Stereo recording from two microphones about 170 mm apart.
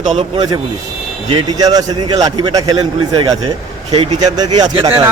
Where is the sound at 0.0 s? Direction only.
40° right (ahead or behind).